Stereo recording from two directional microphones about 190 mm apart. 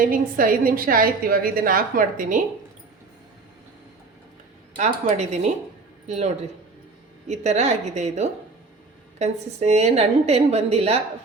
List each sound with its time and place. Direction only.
0.0 s a woman's voice: 45° right (ahead or behind)
4.8 s a woman's voice: 35° right (ahead or behind)